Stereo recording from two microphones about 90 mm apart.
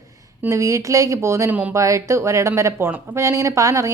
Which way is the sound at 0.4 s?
35° right (ahead or behind).